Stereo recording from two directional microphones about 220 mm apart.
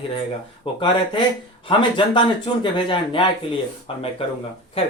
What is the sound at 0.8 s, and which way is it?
Speech, 25° left (ahead or behind).